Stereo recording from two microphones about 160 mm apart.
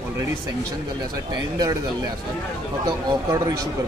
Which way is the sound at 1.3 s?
25° right (ahead or behind).